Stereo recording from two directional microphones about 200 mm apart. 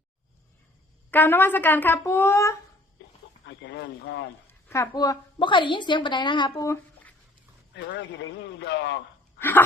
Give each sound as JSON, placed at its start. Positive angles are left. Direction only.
{"t": 1.1, "sound": "speech", "side_deg": 10}
{"t": 3.4, "sound": "speech", "side_deg": 60}
{"t": 4.7, "sound": "a woman's voice", "side_deg": 15}
{"t": 7.8, "sound": "a man's voice", "side_deg": 65}
{"t": 9.4, "sound": "dog", "side_deg": 10}